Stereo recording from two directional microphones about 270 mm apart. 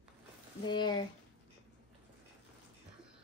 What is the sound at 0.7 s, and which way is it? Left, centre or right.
Speech, centre.